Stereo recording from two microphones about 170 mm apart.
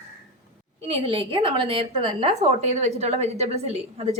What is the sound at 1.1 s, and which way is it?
A woman's voice, 35° right (ahead or behind).